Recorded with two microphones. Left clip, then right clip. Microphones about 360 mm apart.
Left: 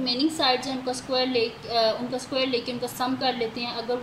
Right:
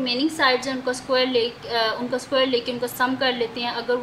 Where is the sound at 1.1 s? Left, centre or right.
Right.